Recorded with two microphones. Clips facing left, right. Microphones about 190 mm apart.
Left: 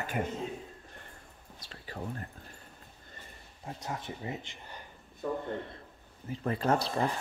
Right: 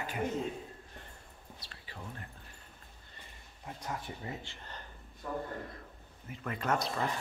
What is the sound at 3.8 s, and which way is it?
Speech, 25° left (ahead or behind).